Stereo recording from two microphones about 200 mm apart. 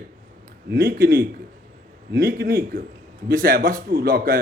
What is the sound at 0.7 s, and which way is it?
Speech, 50° right (ahead or behind).